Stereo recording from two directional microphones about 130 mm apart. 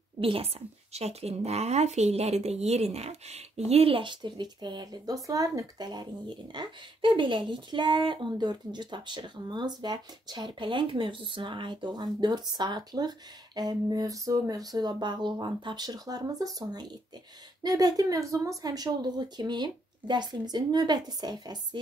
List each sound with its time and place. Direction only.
0.2 s speech: 45° right (ahead or behind)